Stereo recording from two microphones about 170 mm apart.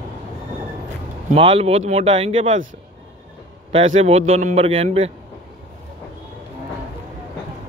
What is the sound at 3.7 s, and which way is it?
A man's voice, 35° right (ahead or behind).